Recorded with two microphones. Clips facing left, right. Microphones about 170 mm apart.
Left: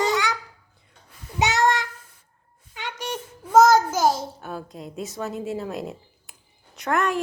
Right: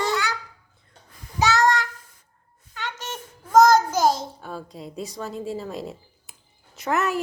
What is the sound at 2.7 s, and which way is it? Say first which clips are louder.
A child's voice: left 2 dB; 15° left (ahead or behind).